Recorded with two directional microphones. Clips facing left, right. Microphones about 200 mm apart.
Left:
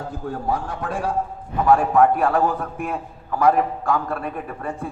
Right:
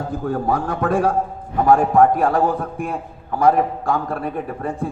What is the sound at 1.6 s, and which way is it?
Speech, 35° right (ahead or behind).